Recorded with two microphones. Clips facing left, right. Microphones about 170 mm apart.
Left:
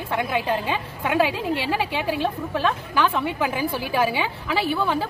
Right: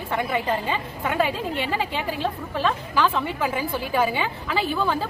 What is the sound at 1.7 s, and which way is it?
Speech, 75° left (ahead or behind).